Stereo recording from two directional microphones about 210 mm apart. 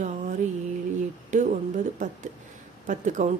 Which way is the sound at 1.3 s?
35° right (ahead or behind).